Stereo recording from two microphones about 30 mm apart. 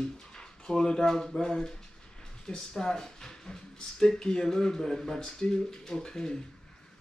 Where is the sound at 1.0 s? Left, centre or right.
Centre.